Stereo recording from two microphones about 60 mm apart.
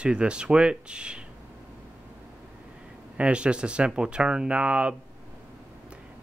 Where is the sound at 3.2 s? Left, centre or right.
Centre.